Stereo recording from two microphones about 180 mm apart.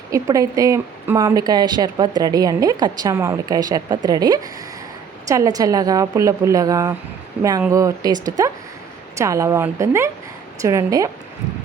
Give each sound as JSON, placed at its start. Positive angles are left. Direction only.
{"t": 0.1, "sound": "a woman's voice", "side_deg": -20}